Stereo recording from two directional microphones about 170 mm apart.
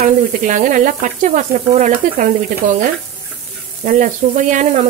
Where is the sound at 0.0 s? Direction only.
50° right (ahead or behind).